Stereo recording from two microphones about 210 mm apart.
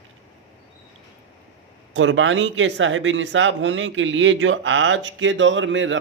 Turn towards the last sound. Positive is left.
turn(degrees=-60)  # may be behind; listen again after turning